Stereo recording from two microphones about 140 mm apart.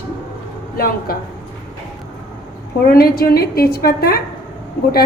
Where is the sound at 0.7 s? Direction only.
90° left.